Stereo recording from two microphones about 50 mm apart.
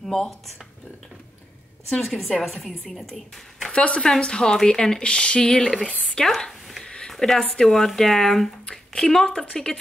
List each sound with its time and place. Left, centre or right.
0.0 s speech: centre
1.9 s a woman's voice: centre
3.7 s speech: left; by 8.5 s centre
8.6 s a sound: centre
9.4 s speech: centre